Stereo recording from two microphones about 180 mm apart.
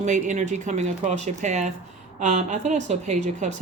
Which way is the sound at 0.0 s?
40° right (ahead or behind).